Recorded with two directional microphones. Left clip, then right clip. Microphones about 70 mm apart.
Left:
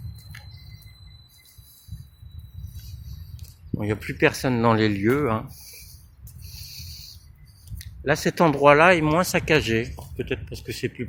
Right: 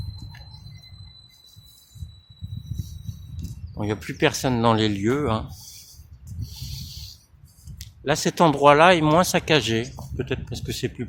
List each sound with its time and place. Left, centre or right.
3.4 s cricket: centre
3.8 s speech: centre
4.3 s speech: centre
6.4 s a sound: right
7.8 s speech: centre
8.9 s speech: right